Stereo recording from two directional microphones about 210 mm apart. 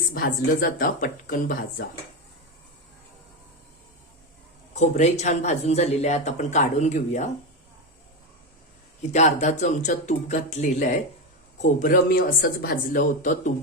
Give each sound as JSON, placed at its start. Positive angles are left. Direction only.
{"t": 0.1, "sound": "speech", "side_deg": 45}
{"t": 4.7, "sound": "speech", "side_deg": 35}
{"t": 9.1, "sound": "speech", "side_deg": 35}